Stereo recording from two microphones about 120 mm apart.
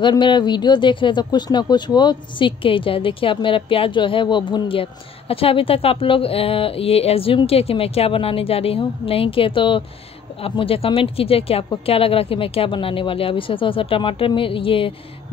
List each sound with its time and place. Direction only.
0.0 s a woman's voice: 40° left (ahead or behind)